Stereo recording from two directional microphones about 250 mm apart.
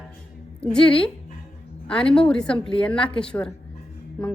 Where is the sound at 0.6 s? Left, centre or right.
Centre.